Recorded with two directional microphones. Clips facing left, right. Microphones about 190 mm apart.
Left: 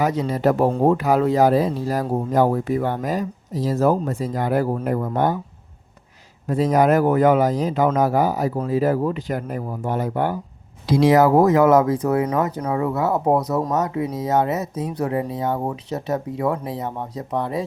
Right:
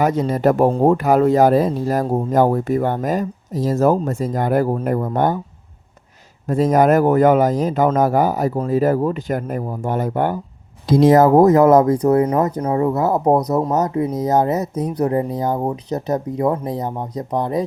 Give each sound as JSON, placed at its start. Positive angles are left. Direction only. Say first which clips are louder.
{"t": 0.0, "sound": "speech", "louder": "right 3 dB", "side_deg": -50}
{"t": 0.7, "sound": "speech", "louder": "right 3 dB", "side_deg": -35}
{"t": 0.9, "sound": "speech", "louder": "right 4 dB", "side_deg": -50}
{"t": 6.5, "sound": "speech", "louder": "right 3 dB", "side_deg": -45}
{"t": 13.3, "sound": "speech", "louder": "right 3 dB", "side_deg": -20}
{"t": 13.7, "sound": "speech", "louder": "right 4 dB", "side_deg": -35}